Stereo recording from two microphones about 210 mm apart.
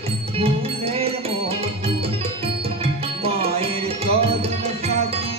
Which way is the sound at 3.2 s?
30° right (ahead or behind).